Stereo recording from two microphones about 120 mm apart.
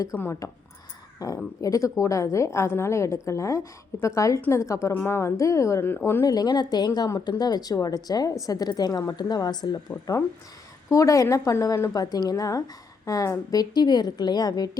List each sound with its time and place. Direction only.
0.2 s a woman's voice: 25° left (ahead or behind)
6.2 s speech: 35° left (ahead or behind)
9.9 s a woman's voice: 20° left (ahead or behind); by 14.7 s 35° left (ahead or behind)